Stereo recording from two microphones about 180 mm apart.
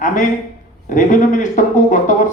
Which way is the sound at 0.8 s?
45° left (ahead or behind).